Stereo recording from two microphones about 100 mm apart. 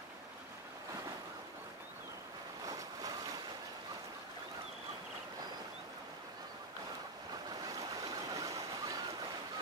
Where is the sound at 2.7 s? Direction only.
35° right (ahead or behind).